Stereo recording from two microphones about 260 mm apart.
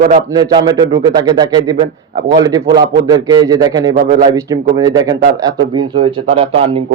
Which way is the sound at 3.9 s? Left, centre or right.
Right.